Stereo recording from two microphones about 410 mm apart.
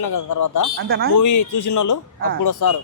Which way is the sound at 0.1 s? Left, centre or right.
Left.